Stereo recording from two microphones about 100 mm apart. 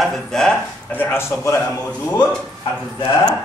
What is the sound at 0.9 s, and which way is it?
Speech, 20° left (ahead or behind).